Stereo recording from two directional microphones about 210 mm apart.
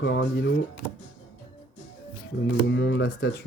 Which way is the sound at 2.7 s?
55° left (ahead or behind).